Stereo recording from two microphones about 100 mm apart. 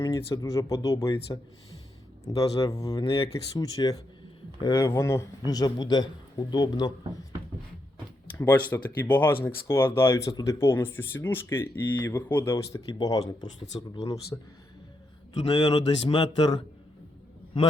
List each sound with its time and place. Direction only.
0.0 s speech: 30° left (ahead or behind)
5.5 s speech: 40° left (ahead or behind)
8.3 s speech: 20° left (ahead or behind)
12.9 s speech: 40° left (ahead or behind)
15.5 s speech: 50° left (ahead or behind)